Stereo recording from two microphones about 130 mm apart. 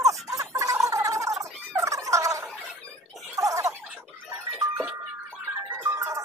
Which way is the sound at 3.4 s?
25° right (ahead or behind).